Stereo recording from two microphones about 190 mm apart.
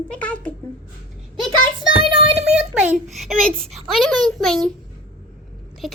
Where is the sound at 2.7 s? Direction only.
35° right (ahead or behind).